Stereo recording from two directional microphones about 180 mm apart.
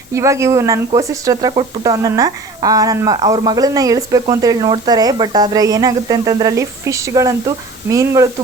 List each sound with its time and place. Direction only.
0.1 s speech: 15° right (ahead or behind)